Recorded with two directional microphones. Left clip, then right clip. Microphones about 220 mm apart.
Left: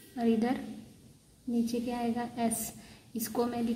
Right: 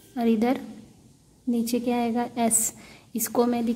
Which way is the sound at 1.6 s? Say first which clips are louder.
Right 8 dB; 30° right (ahead or behind).